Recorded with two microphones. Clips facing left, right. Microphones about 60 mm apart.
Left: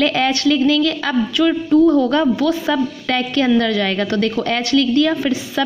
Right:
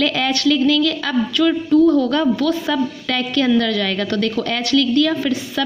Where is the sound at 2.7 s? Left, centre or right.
Left.